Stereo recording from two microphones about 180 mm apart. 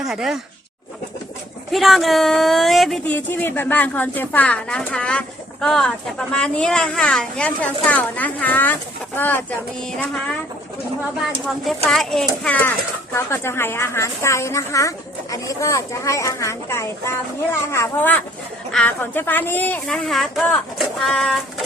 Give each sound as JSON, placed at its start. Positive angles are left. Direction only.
{"t": 0.0, "sound": "speech", "side_deg": -5}
{"t": 1.7, "sound": "a woman's voice", "side_deg": 0}
{"t": 11.4, "sound": "a woman's voice", "side_deg": 0}